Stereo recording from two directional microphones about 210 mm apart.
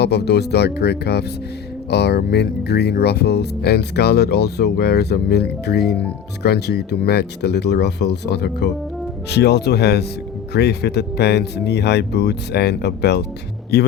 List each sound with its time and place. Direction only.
0.0 s speech: 50° left (ahead or behind)